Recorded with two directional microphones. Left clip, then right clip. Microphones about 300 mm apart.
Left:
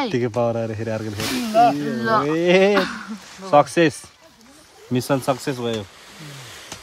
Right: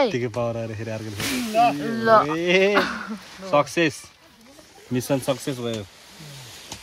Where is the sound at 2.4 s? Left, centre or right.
Left.